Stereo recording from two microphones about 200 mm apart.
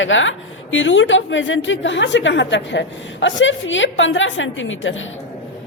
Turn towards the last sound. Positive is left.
turn(degrees=70)  # may be behind; listen again after turning